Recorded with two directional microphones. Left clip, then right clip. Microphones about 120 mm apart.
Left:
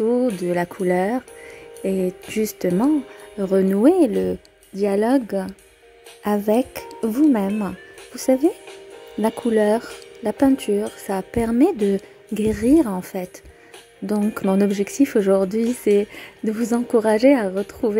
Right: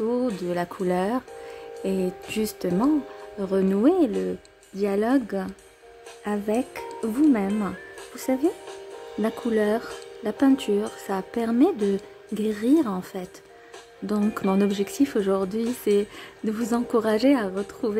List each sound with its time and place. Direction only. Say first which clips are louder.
0.0 s speech: left 6 dB; 30° left (ahead or behind)
6.2 s speech: left 7 dB; 40° left (ahead or behind)
7.0 s speech: left 4 dB; 30° left (ahead or behind)